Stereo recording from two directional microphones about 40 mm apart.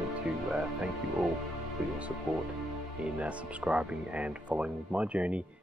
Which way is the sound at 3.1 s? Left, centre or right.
Right.